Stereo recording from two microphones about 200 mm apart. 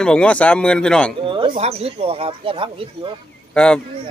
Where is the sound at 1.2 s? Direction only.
25° right (ahead or behind).